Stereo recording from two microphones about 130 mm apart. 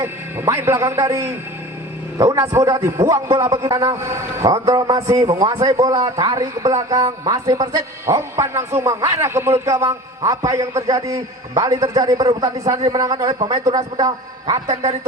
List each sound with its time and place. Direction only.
0.0 s a man's voice: 20° right (ahead or behind)